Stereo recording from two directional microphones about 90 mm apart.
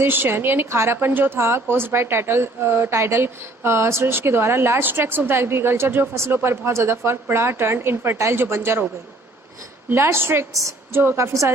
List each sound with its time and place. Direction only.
0.0 s speech: 25° right (ahead or behind)
9.9 s speech: 30° right (ahead or behind)
10.5 s a woman's voice: 35° right (ahead or behind)